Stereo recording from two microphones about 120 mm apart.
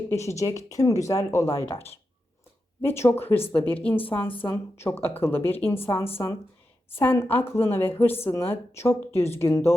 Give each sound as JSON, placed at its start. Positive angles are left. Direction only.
{"t": 0.1, "sound": "a woman's voice", "side_deg": 25}